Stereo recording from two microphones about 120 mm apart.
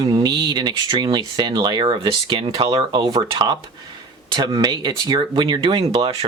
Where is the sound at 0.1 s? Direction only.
35° right (ahead or behind).